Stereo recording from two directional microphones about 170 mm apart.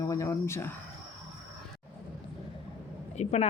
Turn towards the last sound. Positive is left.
turn(degrees=40)  # may be behind; listen again after turning